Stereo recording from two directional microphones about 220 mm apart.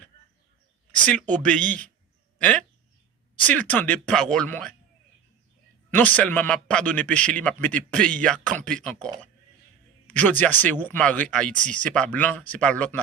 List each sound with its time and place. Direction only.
1.3 s a man's voice: 5° left (ahead or behind)
5.9 s a man's voice: 5° left (ahead or behind)
10.1 s speech: 5° left (ahead or behind)